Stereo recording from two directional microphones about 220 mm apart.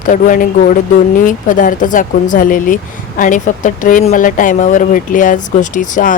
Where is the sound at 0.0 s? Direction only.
35° left (ahead or behind).